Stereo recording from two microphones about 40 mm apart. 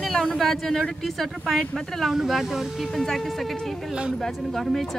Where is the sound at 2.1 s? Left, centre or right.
Centre.